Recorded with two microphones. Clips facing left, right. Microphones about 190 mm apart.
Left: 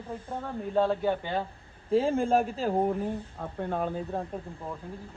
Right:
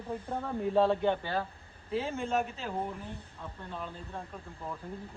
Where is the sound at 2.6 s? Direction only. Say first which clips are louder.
Left 10 dB; 50° left (ahead or behind).